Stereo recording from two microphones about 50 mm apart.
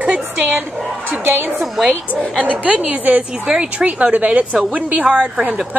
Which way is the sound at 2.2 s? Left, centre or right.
Centre.